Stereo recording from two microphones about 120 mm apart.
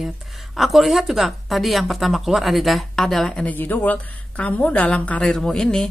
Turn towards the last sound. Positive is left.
turn(degrees=5)  # may be behind; listen again after turning